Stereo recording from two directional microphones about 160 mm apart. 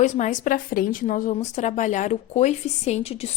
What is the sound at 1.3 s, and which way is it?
A woman's voice, 45° left (ahead or behind).